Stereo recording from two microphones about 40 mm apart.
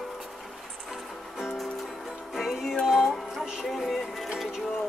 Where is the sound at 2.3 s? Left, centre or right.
Centre.